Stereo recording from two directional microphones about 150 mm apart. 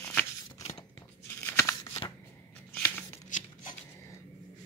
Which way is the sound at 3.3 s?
55° left (ahead or behind).